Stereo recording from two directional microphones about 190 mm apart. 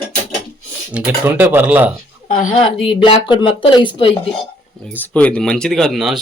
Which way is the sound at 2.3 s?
45° left (ahead or behind).